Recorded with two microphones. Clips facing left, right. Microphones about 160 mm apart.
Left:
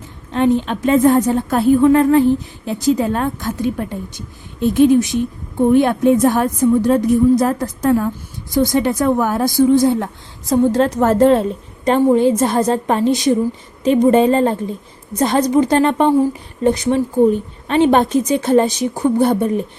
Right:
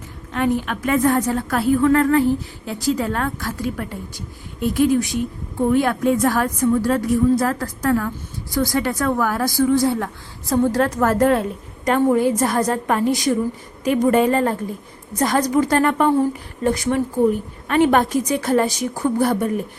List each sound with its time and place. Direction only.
0.3 s a woman's voice: 25° left (ahead or behind)